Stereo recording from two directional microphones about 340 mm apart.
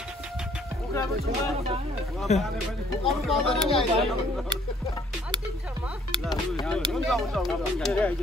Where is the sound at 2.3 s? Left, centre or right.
Centre.